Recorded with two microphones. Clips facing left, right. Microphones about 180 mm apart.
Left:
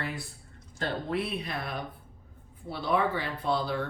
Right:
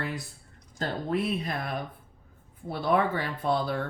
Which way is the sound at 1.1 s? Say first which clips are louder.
Right 3 dB; 45° right (ahead or behind).